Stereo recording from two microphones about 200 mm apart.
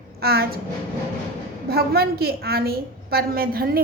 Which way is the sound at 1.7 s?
50° right (ahead or behind).